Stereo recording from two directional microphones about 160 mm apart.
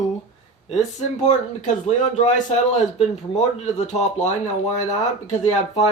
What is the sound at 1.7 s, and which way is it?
Speech, 50° left (ahead or behind).